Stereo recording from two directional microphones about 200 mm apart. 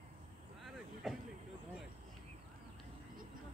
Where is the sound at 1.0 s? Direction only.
Centre (ahead or behind).